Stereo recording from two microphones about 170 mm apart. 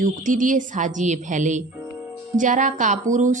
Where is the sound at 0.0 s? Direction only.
50° right (ahead or behind).